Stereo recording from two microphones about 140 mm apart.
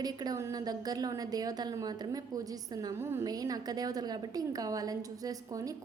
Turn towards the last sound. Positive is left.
turn(degrees=-25)  # may be behind; listen again after turning